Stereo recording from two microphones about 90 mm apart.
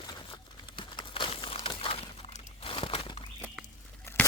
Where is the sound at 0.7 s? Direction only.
65° left (ahead or behind); by 3.0 s 90° left.